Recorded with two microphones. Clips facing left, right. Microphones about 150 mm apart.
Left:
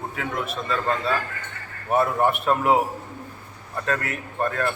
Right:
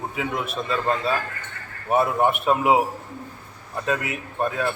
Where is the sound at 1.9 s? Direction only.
20° right (ahead or behind).